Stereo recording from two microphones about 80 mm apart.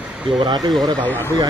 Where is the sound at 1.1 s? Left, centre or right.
Left.